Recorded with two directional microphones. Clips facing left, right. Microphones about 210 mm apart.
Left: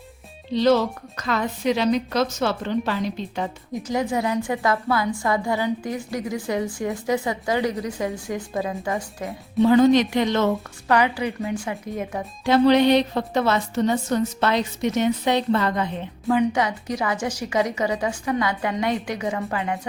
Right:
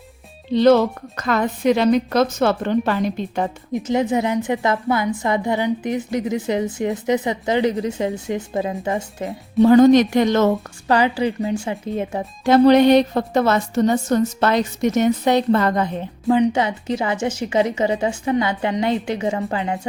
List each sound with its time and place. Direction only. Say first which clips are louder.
0.5 s a woman's voice: right 5 dB; 55° right (ahead or behind)
3.7 s a woman's voice: right 5 dB; 25° right (ahead or behind)
9.6 s a woman's voice: right 5 dB; 45° right (ahead or behind)
10.8 s a woman's voice: right 3 dB; 30° right (ahead or behind)
12.5 s a woman's voice: right 4 dB; 45° right (ahead or behind)
16.2 s a woman's voice: right 4 dB; 20° right (ahead or behind)